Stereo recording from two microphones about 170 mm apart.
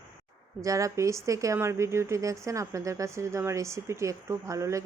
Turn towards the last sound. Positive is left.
turn(degrees=-20)  # may be behind; listen again after turning